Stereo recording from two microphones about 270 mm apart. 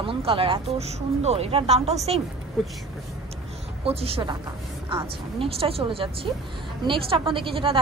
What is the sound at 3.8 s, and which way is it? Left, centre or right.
A woman's voice, right.